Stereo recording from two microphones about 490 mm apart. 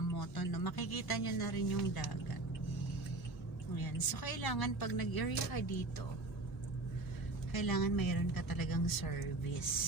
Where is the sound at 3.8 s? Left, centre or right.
Left.